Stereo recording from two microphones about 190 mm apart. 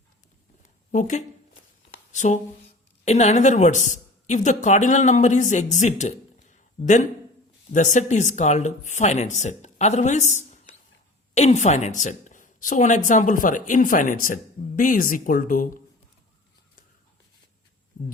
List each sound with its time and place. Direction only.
0.9 s a woman's voice: 40° left (ahead or behind)